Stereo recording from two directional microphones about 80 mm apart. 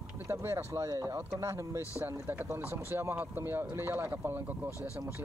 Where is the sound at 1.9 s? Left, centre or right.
Right.